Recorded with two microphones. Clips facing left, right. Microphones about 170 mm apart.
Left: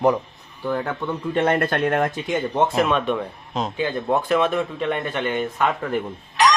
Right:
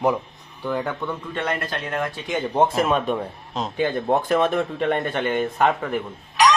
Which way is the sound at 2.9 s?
30° right (ahead or behind).